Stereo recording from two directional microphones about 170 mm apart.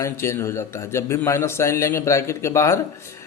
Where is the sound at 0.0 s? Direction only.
15° left (ahead or behind).